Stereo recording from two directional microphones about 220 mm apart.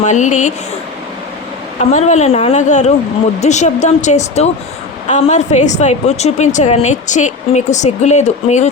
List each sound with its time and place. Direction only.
0.0 s a woman's voice: 35° left (ahead or behind)
1.8 s a woman's voice: 30° left (ahead or behind)